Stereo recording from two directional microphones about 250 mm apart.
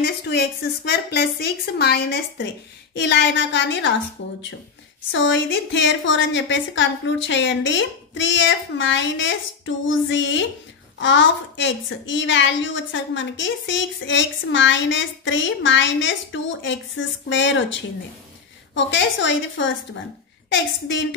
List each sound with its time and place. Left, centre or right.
0.0 s a woman's voice: left
18.9 s a woman's voice: left